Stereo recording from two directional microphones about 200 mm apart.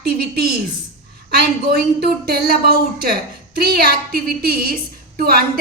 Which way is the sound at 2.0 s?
50° right (ahead or behind).